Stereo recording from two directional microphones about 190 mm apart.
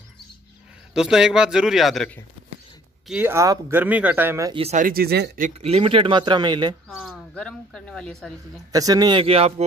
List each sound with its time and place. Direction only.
0.9 s a man's voice: 5° right (ahead or behind)
3.1 s speech: 10° right (ahead or behind)
4.6 s speech: 35° right (ahead or behind); by 5.4 s 60° right (ahead or behind)
5.4 s a man's voice: 35° right (ahead or behind)
6.9 s speech: centre (ahead or behind)
8.7 s a man's voice: 20° right (ahead or behind)